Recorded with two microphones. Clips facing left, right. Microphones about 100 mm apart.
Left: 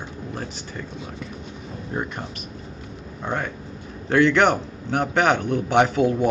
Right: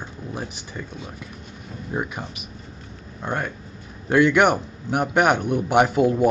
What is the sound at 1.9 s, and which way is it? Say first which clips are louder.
Speech: right 1 dB; 10° right (ahead or behind).